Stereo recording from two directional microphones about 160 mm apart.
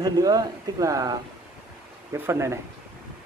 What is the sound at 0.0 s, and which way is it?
Speech, 25° right (ahead or behind).